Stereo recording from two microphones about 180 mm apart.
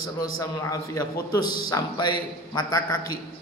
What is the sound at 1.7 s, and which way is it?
Speech, 20° left (ahead or behind).